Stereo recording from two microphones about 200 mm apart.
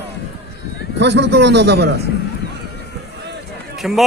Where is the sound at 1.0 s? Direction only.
60° right (ahead or behind).